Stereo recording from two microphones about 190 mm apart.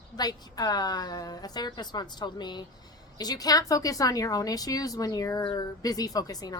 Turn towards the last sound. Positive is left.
turn(degrees=20)  # may be behind; listen again after turning